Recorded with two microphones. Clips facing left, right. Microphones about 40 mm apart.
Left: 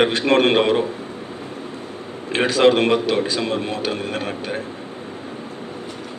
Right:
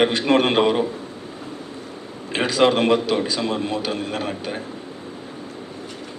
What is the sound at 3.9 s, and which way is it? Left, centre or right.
Speech, left.